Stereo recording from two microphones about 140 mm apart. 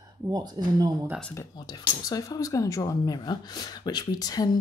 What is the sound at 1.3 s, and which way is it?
Speech, 30° left (ahead or behind).